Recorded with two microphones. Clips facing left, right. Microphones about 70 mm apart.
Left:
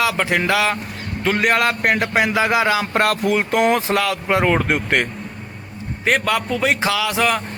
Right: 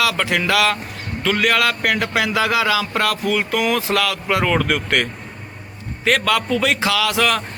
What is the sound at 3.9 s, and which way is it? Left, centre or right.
A man's voice, left.